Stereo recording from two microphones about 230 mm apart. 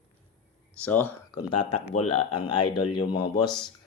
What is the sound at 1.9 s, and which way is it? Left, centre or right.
Speech, left.